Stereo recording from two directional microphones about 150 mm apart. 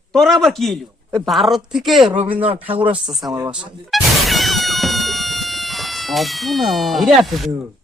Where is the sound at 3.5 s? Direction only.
5° right (ahead or behind).